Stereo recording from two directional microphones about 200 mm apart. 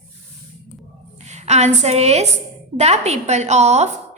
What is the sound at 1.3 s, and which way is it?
A woman's voice, 35° right (ahead or behind).